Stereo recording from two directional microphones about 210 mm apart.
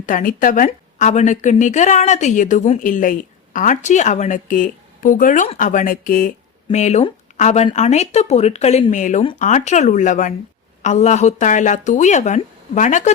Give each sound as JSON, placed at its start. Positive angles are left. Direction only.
{"t": 0.0, "sound": "a woman's voice", "side_deg": 40}